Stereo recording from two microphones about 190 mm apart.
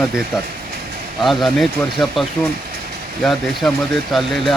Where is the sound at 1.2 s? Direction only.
Centre (ahead or behind).